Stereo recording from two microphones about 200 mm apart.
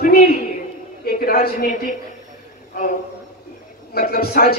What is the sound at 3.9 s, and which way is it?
Speech, 50° left (ahead or behind).